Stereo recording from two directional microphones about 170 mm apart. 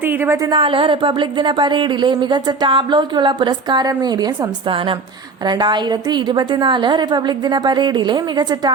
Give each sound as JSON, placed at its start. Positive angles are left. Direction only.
{"t": 0.0, "sound": "a woman's voice", "side_deg": -10}
{"t": 0.5, "sound": "speech", "side_deg": -30}
{"t": 5.5, "sound": "speech", "side_deg": -25}